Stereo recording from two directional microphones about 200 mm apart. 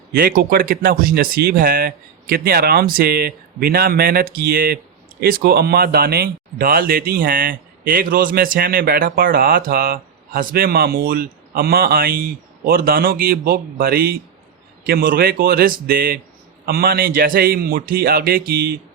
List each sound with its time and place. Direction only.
0.1 s speech: 50° right (ahead or behind)